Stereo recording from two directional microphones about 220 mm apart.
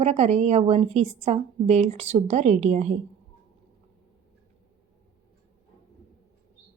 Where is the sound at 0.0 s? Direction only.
30° right (ahead or behind).